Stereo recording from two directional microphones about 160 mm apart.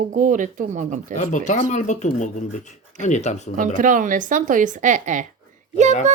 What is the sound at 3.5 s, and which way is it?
A child's voice, 55° right (ahead or behind).